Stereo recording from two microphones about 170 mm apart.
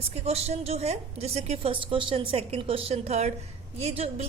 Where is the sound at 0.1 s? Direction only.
40° right (ahead or behind).